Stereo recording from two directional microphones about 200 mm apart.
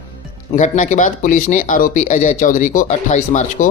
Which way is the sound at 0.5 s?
40° left (ahead or behind).